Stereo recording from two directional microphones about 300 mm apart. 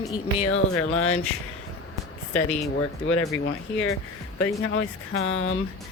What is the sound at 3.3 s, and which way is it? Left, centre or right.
Speech, left.